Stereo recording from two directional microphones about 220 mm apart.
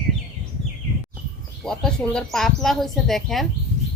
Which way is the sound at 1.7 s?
5° left (ahead or behind).